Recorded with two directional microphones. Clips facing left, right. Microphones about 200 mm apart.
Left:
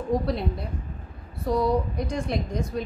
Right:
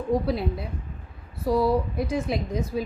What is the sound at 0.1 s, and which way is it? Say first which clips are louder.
A woman's voice: right 1 dB; centre (ahead or behind).